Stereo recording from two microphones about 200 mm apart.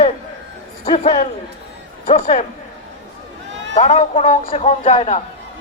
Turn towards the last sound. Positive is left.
turn(degrees=30)  # may be behind; listen again after turning